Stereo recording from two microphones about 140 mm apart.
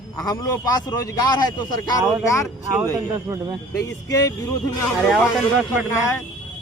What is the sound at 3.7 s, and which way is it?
Speech, 25° left (ahead or behind).